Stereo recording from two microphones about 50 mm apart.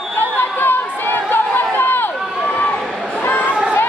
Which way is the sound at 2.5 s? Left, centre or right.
Left.